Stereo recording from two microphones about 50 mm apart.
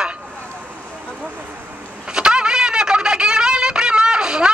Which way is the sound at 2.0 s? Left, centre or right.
Centre.